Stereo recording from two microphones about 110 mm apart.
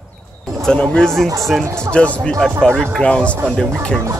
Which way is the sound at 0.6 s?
5° left (ahead or behind).